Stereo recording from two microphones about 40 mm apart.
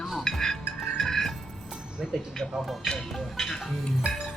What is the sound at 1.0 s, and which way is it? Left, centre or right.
Music, centre.